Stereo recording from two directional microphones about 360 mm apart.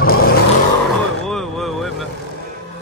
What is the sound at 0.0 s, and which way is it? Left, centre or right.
Vehicle, left.